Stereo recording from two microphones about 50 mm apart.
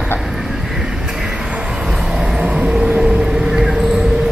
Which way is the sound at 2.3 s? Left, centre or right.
Right.